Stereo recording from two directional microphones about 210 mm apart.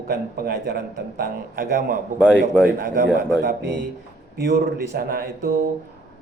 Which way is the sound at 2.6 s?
50° right (ahead or behind).